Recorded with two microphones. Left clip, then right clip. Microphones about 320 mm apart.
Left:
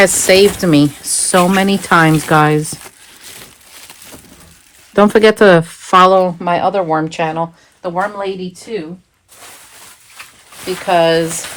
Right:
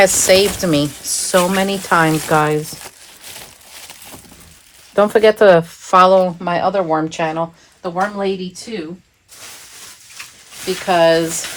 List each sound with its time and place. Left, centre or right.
0.3 s speech: left
3.4 s a sound: centre
4.9 s speech: left
10.8 s speech: left